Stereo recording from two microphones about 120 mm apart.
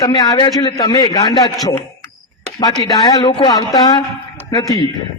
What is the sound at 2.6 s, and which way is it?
A man's voice, 35° left (ahead or behind).